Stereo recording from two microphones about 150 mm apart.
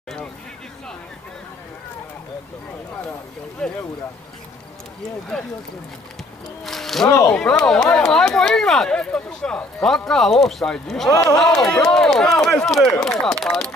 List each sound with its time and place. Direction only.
3.6 s speech: 5° left (ahead or behind)
5.3 s speech: 5° left (ahead or behind)
6.6 s a sound: centre (ahead or behind)
7.2 s speech: 5° left (ahead or behind)
11.1 s speech: 20° left (ahead or behind)
11.3 s speech: 5° left (ahead or behind)